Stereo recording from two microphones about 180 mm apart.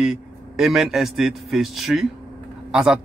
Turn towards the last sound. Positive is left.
turn(degrees=-5)  # may be behind; listen again after turning